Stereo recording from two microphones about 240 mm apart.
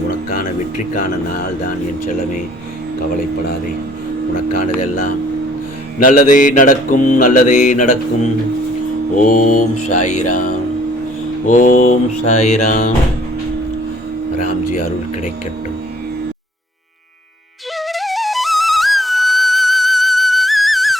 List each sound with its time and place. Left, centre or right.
0.3 s a sound: left
4.6 s speech: left
6.0 s mantra: left
14.3 s speech: left
17.7 s flute: centre